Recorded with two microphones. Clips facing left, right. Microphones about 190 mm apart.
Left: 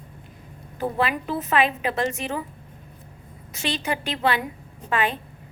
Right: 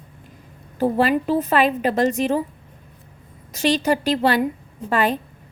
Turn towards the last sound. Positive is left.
turn(degrees=-40)  # may be behind; listen again after turning